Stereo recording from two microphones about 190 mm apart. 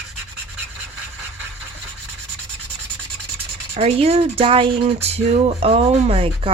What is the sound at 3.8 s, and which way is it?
Speech, 30° right (ahead or behind).